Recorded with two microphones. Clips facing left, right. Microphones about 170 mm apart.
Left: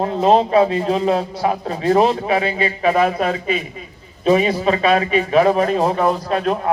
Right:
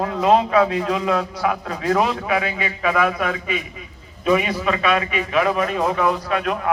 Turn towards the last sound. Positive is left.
turn(degrees=30)  # may be behind; listen again after turning